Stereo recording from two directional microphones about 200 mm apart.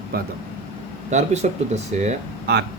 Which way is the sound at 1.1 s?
35° right (ahead or behind).